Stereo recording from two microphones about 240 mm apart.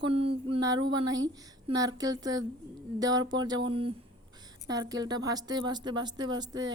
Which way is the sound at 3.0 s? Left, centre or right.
Centre.